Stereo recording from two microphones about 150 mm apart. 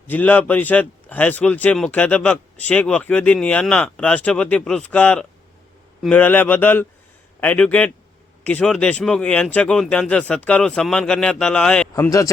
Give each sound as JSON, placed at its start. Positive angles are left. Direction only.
{"t": 0.1, "sound": "speech", "side_deg": 10}
{"t": 11.9, "sound": "a man's voice", "side_deg": 20}